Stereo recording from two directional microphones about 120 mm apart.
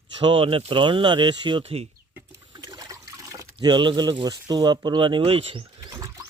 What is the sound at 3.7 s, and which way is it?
Speech, 40° right (ahead or behind).